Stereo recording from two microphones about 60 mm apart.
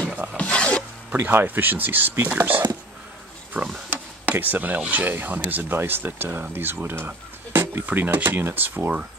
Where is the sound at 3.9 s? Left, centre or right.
Right.